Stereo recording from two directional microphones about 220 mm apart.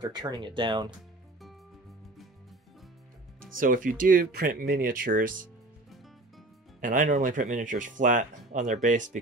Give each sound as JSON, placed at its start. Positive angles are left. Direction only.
{"t": 0.0, "sound": "speech", "side_deg": -20}
{"t": 3.5, "sound": "speech", "side_deg": -40}
{"t": 6.8, "sound": "speech", "side_deg": -35}